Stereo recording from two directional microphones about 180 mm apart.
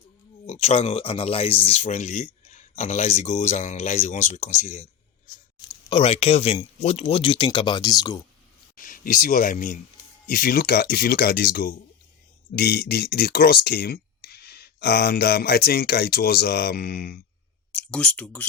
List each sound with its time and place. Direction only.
0.4 s speech: 35° left (ahead or behind); by 8.2 s 20° left (ahead or behind)
8.7 s speech: 50° left (ahead or behind)
17.7 s speech: 5° left (ahead or behind)